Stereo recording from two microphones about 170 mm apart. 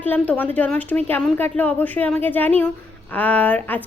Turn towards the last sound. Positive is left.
turn(degrees=10)  # may be behind; listen again after turning